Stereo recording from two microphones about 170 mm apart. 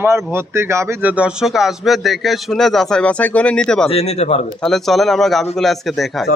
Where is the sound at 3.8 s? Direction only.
35° left (ahead or behind).